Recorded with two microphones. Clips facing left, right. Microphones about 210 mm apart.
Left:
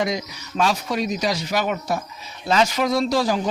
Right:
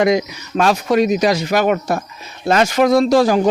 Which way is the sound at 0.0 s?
65° right (ahead or behind).